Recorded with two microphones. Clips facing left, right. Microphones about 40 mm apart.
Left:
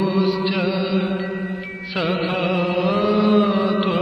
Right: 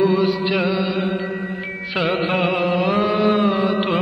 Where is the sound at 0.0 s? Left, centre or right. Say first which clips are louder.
Right 2 dB; centre.